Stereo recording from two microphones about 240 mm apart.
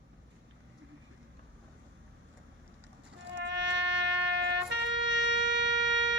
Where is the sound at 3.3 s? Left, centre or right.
Right.